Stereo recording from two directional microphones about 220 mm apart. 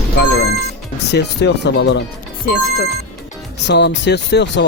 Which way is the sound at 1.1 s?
50° left (ahead or behind).